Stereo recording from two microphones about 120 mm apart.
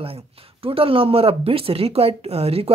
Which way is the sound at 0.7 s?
50° right (ahead or behind).